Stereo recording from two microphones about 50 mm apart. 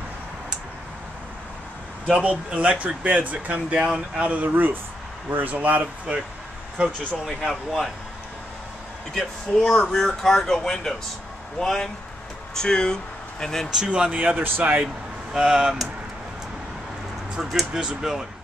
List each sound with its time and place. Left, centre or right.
2.0 s speech: right
3.8 s speech: centre
4.2 s speech: right
7.2 s speech: centre
9.1 s speech: centre
13.7 s speech: centre
14.1 s speech: right
15.3 s speech: centre
17.4 s speech: centre